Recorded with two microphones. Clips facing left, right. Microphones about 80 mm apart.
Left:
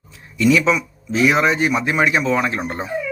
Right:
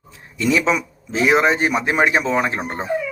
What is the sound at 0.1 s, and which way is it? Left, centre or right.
A man's voice, right.